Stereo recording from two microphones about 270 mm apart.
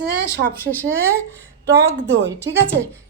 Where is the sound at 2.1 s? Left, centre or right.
Right.